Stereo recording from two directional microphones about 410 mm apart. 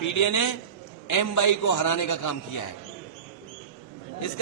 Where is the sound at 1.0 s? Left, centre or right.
Left.